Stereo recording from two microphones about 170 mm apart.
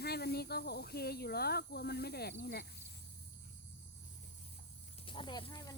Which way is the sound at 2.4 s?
70° left (ahead or behind).